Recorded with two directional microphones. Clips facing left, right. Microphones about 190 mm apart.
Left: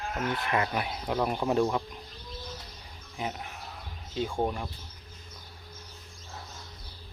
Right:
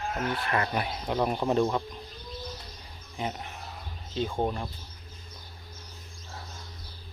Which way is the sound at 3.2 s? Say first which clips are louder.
Right 1 dB; 5° left (ahead or behind).